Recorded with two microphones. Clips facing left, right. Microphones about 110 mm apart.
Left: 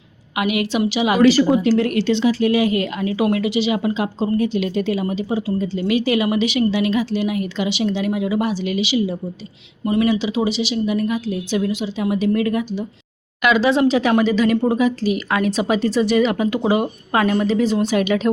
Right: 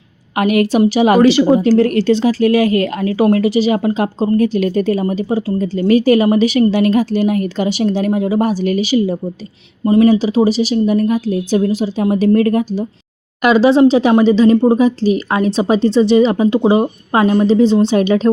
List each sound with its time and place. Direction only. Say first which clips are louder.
0.3 s speech: right 7 dB; 45° right (ahead or behind)
1.4 s a woman's voice: right 5 dB; 35° right (ahead or behind)